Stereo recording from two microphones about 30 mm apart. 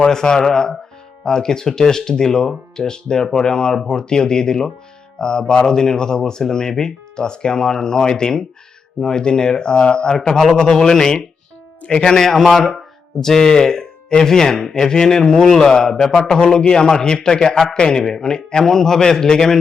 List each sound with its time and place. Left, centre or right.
0.0 s speech: left